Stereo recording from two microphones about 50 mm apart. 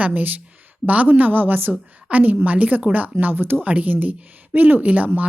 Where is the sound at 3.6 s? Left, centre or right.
Right.